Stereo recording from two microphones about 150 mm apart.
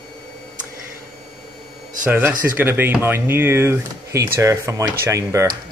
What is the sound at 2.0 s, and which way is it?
Speech, 10° right (ahead or behind).